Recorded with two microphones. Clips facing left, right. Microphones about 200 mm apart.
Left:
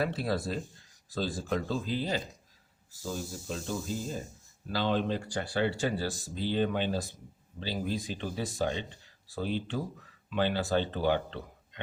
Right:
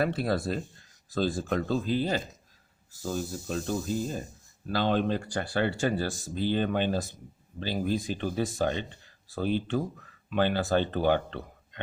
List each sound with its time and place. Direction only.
0.0 s speech: 55° right (ahead or behind)
4.7 s speech: 55° right (ahead or behind)